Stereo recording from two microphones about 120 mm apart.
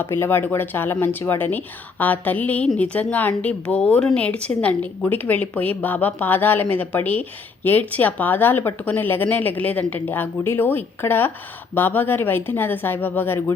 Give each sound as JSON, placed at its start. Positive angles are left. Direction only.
{"t": 0.0, "sound": "speech", "side_deg": 20}